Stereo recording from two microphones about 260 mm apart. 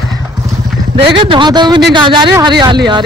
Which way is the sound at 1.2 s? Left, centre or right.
Centre.